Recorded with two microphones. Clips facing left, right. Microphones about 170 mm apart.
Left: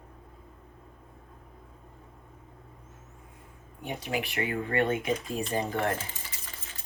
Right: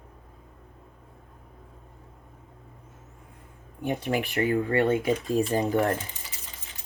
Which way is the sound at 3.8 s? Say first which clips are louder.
Right 6 dB; 50° right (ahead or behind).